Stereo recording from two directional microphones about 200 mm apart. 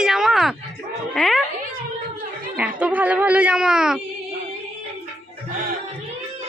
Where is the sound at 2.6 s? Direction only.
5° right (ahead or behind).